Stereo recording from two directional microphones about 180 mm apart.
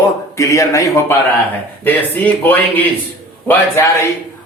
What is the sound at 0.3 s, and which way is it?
Speech, 15° left (ahead or behind).